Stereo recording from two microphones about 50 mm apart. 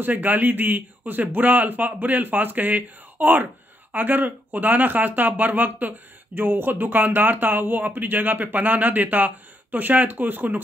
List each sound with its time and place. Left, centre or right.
0.0 s speech: right